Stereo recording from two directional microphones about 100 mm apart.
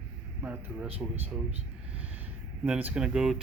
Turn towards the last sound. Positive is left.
turn(degrees=-5)  # may be behind; listen again after turning